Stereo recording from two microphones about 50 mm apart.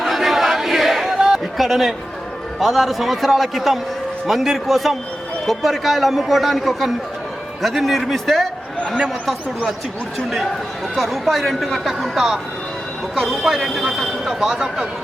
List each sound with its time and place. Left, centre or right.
0.0 s crowd: centre
1.5 s speech: centre
10.2 s speech: centre